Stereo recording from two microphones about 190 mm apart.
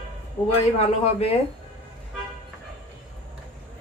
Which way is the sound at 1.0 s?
35° left (ahead or behind).